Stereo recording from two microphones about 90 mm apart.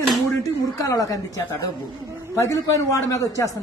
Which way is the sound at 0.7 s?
40° left (ahead or behind).